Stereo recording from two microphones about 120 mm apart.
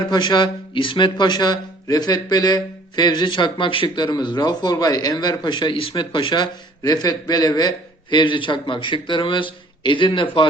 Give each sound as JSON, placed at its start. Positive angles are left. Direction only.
{"t": 0.1, "sound": "speech", "side_deg": 40}